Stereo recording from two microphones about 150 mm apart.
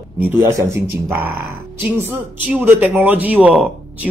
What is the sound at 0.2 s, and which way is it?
Speech, 15° right (ahead or behind).